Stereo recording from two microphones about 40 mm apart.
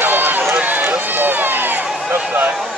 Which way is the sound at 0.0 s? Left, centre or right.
Right.